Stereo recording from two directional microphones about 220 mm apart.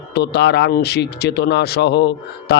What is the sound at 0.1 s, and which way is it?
Speech, 50° left (ahead or behind).